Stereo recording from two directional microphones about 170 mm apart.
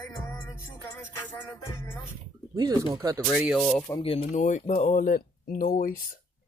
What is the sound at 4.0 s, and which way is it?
Speech, 35° left (ahead or behind).